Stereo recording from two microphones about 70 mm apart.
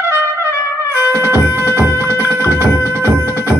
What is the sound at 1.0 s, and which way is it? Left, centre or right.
Music, right.